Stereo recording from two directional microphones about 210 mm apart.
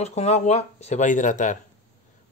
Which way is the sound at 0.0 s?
30° left (ahead or behind).